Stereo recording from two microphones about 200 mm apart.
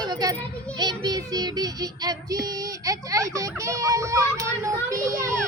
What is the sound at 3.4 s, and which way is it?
Children playing, 15° right (ahead or behind).